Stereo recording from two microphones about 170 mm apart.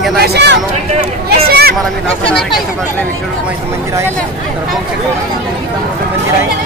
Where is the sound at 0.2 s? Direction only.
80° right.